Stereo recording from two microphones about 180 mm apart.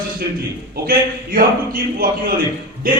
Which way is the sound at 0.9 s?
50° right (ahead or behind).